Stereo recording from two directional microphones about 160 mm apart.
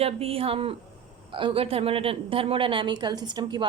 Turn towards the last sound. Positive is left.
turn(degrees=-25)  # may be behind; listen again after turning